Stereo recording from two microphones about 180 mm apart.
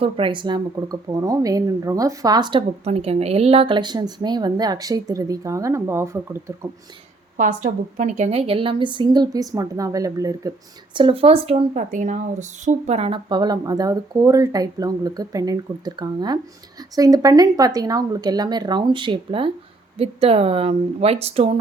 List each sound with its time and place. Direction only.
0.0 s speech: 30° right (ahead or behind)
7.3 s speech: 45° right (ahead or behind); by 10.5 s 20° right (ahead or behind)
10.9 s speech: 30° right (ahead or behind)